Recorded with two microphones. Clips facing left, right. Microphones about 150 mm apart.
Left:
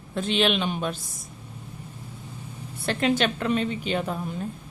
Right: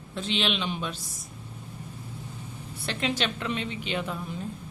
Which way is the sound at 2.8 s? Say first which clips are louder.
Left 6 dB; 50° left (ahead or behind).